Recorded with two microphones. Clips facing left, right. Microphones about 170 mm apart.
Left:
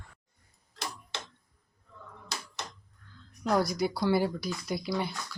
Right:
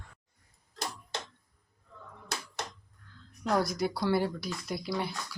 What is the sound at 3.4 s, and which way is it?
Speech, centre (ahead or behind).